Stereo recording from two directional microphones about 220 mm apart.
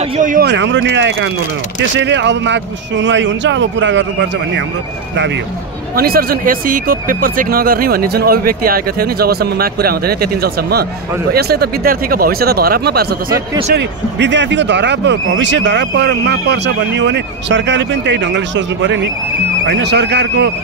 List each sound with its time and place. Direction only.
0.2 s a man's voice: 35° right (ahead or behind)
0.5 s speech: 55° right (ahead or behind)
5.9 s speech: 45° right (ahead or behind)